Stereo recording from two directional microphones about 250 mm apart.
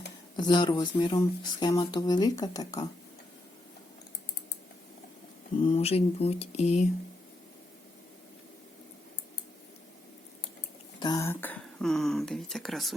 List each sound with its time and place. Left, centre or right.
0.3 s speech: centre
5.6 s speech: left
11.0 s speech: centre